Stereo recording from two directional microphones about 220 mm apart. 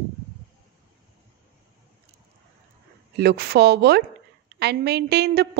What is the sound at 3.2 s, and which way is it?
A woman's voice, 45° right (ahead or behind).